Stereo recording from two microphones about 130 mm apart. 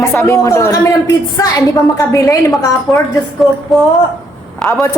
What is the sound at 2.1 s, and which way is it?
Speech, 25° left (ahead or behind).